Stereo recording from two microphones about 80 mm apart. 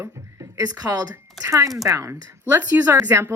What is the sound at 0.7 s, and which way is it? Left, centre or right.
Speech, right.